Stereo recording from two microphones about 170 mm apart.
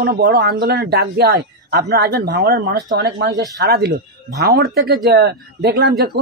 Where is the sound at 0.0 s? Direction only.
60° right (ahead or behind).